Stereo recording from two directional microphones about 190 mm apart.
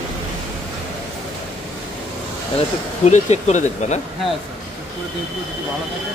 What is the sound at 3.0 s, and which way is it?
Speech, 35° left (ahead or behind).